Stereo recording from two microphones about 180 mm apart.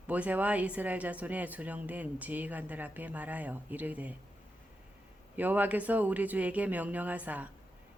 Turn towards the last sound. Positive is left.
turn(degrees=-10)  # may be behind; listen again after turning